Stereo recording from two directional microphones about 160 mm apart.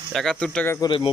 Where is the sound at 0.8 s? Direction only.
30° left (ahead or behind).